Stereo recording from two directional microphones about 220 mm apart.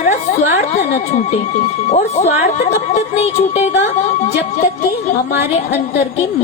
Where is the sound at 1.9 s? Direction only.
30° left (ahead or behind).